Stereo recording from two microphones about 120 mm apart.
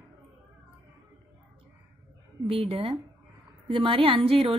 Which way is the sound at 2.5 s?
50° right (ahead or behind).